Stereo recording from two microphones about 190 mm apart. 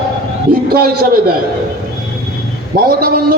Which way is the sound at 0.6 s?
55° right (ahead or behind).